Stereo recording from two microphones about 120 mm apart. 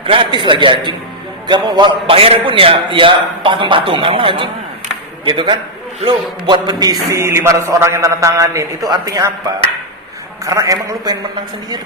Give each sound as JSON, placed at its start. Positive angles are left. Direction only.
{"t": 0.0, "sound": "a man's voice", "side_deg": -50}
{"t": 10.4, "sound": "a man's voice", "side_deg": -30}